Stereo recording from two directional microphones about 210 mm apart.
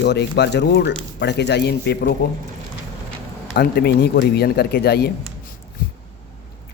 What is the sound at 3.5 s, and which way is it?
A man's voice, 45° left (ahead or behind).